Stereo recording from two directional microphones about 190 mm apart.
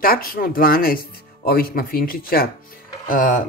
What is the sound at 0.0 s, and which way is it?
Speech, 50° left (ahead or behind).